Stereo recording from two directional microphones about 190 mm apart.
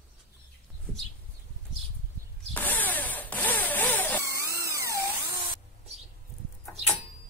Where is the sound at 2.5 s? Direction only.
10° left (ahead or behind).